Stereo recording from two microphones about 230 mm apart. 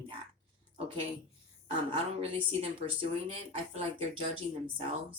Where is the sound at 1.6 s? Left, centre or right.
Right.